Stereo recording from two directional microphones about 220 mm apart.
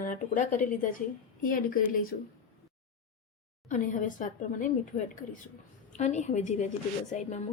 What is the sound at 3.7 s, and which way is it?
A woman's voice, 35° left (ahead or behind).